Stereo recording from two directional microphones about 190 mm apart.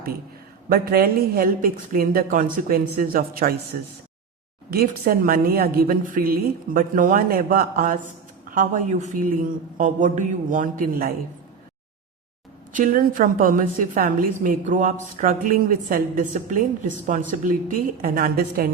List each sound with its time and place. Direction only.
0.7 s a woman's voice: 50° right (ahead or behind)
12.7 s a woman's voice: 45° right (ahead or behind)